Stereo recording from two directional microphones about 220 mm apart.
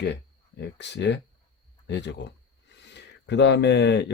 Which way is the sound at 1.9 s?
50° left (ahead or behind).